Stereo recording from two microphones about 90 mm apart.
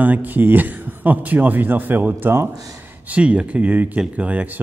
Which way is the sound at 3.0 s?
15° right (ahead or behind).